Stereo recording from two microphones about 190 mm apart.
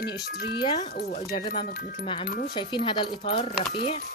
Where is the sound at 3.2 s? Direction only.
35° left (ahead or behind).